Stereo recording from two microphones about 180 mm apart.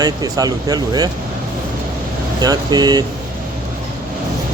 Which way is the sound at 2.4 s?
20° right (ahead or behind).